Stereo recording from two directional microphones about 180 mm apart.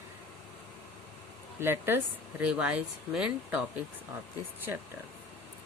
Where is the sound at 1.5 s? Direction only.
15° right (ahead or behind).